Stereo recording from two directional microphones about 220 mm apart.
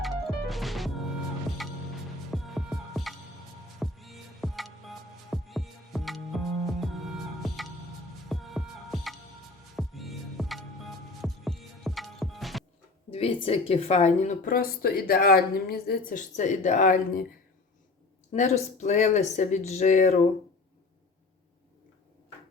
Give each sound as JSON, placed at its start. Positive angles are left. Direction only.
{"t": 0.0, "sound": "music", "side_deg": 0}
{"t": 2.3, "sound": "music", "side_deg": 0}
{"t": 13.1, "sound": "speech", "side_deg": 25}
{"t": 18.3, "sound": "speech", "side_deg": 30}